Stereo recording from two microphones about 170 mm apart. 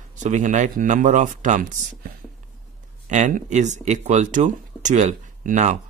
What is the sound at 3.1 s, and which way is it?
Speech, 45° right (ahead or behind).